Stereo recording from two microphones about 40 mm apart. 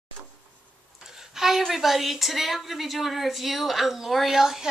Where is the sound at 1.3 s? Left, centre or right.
Centre.